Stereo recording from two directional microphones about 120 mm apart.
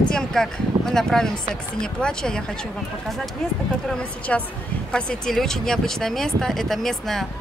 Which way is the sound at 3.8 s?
10° left (ahead or behind).